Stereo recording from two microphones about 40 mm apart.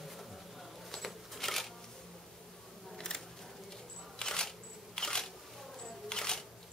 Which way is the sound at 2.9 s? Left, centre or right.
Centre.